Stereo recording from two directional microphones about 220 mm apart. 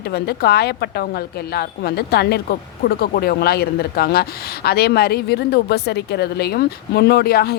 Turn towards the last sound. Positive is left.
turn(degrees=45)  # may be behind; listen again after turning